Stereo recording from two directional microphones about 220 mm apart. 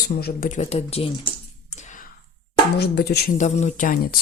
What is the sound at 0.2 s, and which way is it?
Speech, 40° left (ahead or behind).